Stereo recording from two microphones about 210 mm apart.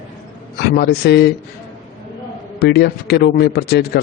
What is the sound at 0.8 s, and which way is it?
Speech, 50° left (ahead or behind).